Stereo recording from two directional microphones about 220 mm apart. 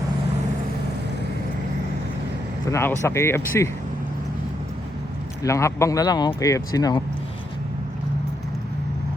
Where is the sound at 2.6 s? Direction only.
10° left (ahead or behind).